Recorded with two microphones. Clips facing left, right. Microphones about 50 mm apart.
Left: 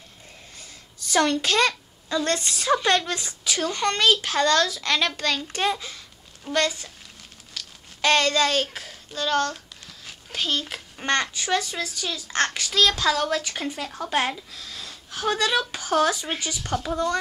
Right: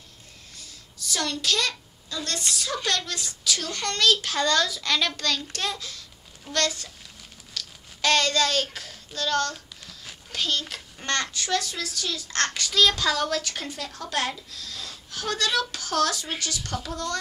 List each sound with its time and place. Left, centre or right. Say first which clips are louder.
0.6 s a woman's voice: even; left; by 6.9 s centre
7.5 s a sound: right 1 dB; centre
11.0 s a child's voice: left 4 dB; centre